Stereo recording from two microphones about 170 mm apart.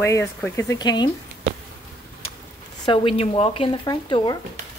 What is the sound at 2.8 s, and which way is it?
Speech, 30° left (ahead or behind).